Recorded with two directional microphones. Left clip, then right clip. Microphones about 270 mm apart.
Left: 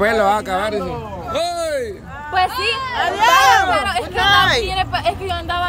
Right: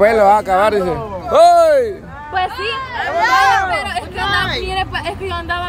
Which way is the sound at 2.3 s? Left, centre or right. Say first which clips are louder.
Left 1 dB; left.